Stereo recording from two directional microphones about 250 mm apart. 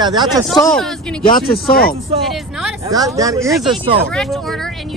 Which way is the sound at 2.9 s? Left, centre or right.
Centre.